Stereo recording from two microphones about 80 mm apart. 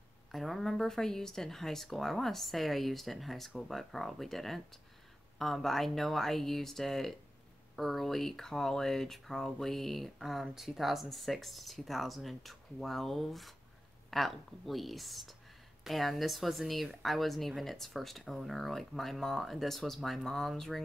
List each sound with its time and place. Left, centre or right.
0.3 s speech: centre